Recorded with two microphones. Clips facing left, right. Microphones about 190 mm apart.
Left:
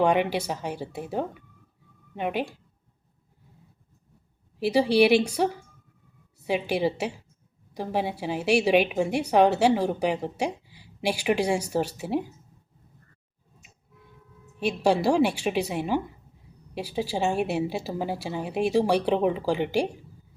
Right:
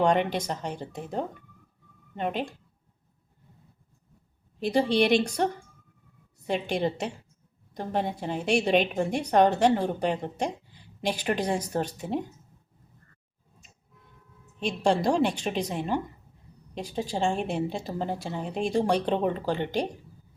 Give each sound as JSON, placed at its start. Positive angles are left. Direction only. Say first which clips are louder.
{"t": 0.0, "sound": "a woman's voice", "louder": "left 1 dB", "side_deg": 5}
{"t": 4.6, "sound": "a woman's voice", "louder": "left 3 dB", "side_deg": 5}
{"t": 14.6, "sound": "a woman's voice", "louder": "left 2 dB", "side_deg": 5}